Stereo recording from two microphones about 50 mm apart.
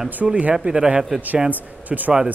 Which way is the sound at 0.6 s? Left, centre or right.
Right.